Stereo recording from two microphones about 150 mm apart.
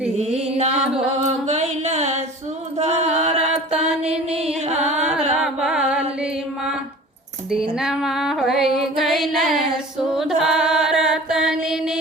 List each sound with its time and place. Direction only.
0.5 s music: 40° right (ahead or behind)
2.7 s chant: 50° right (ahead or behind)
3.7 s mantra: 5° right (ahead or behind)
4.1 s music: 5° right (ahead or behind)
4.9 s music: 45° right (ahead or behind)
5.4 s music: 5° right (ahead or behind)
7.8 s music: 5° right (ahead or behind)